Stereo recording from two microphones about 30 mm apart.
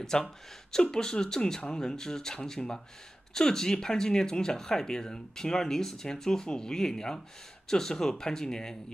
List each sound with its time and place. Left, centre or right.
0.0 s speech: centre